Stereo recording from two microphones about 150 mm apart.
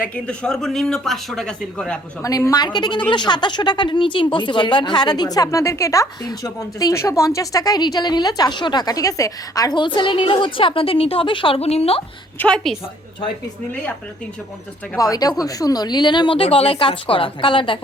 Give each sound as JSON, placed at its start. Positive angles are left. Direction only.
{"t": 0.0, "sound": "speech", "side_deg": 5}
{"t": 2.2, "sound": "a woman's voice", "side_deg": 25}
{"t": 12.4, "sound": "speech", "side_deg": 5}
{"t": 14.9, "sound": "speech", "side_deg": 25}